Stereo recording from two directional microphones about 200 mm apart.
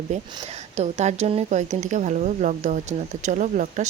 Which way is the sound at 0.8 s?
35° right (ahead or behind).